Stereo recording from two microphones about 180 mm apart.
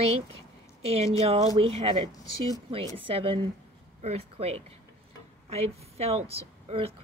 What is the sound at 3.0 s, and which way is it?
Speech, 30° right (ahead or behind).